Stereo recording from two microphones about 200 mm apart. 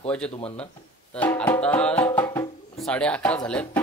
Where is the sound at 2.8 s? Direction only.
5° left (ahead or behind).